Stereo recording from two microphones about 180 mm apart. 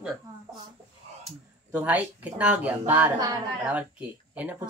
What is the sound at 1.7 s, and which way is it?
Speech, 10° right (ahead or behind).